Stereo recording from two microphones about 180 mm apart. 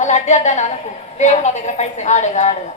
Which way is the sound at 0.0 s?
40° left (ahead or behind).